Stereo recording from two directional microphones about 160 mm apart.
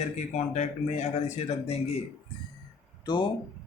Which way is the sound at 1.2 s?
45° left (ahead or behind).